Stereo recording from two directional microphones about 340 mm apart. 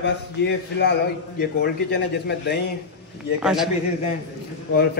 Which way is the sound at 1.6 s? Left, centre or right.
Left.